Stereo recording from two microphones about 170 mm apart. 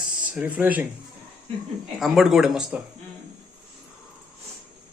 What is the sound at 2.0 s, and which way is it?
Speech, centre (ahead or behind).